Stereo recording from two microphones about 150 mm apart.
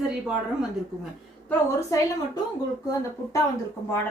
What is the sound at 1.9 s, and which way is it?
Speech, 20° left (ahead or behind).